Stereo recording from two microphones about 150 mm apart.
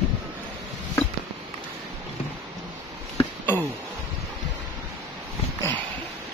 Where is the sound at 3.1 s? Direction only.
10° left (ahead or behind).